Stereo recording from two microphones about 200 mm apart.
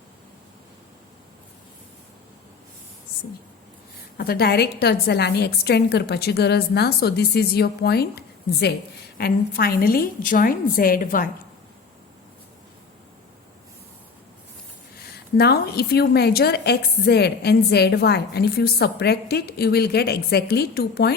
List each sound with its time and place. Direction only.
4.2 s a woman's voice: 50° left (ahead or behind)
15.4 s a woman's voice: 50° left (ahead or behind)